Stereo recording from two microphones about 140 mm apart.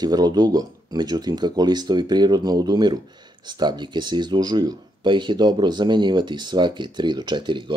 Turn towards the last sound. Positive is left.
turn(degrees=-35)  # may be behind; listen again after turning